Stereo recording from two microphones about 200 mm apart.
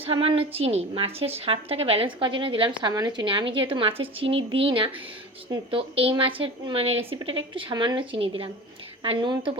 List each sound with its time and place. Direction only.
0.0 s a woman's voice: 25° right (ahead or behind)